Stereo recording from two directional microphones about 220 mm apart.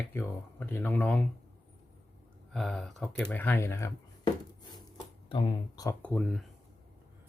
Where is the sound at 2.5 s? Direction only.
Centre (ahead or behind); by 5.9 s 20° left (ahead or behind).